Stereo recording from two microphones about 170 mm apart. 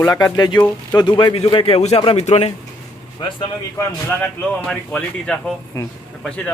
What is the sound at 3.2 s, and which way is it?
Speech, 25° left (ahead or behind).